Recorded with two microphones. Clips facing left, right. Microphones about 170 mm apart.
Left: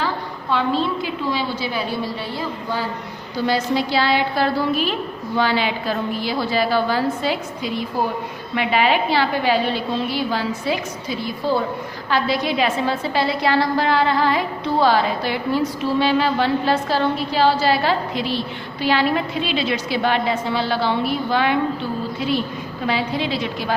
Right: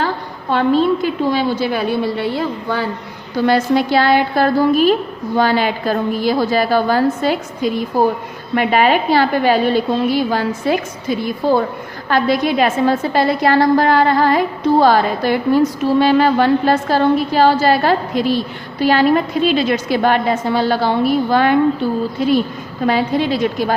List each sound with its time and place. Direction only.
0.5 s a woman's voice: 50° right (ahead or behind)
22.9 s a woman's voice: 45° right (ahead or behind)